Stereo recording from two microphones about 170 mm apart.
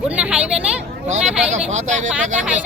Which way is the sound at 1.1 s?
45° right (ahead or behind).